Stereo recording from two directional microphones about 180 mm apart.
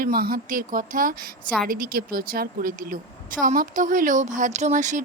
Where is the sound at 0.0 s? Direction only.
55° right (ahead or behind).